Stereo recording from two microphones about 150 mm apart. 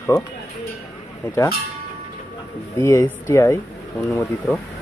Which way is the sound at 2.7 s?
20° left (ahead or behind).